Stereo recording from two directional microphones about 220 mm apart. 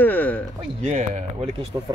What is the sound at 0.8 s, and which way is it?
Speech, 35° right (ahead or behind).